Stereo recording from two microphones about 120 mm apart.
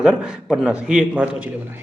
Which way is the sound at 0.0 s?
5° right (ahead or behind).